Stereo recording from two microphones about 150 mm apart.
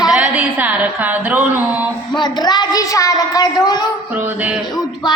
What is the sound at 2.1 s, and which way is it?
A woman's voice, 30° left (ahead or behind).